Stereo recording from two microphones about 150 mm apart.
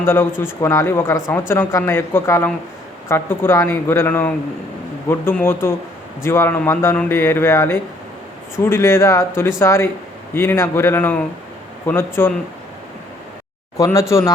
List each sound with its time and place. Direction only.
0.0 s a man's voice: 15° left (ahead or behind)
13.7 s speech: 20° left (ahead or behind)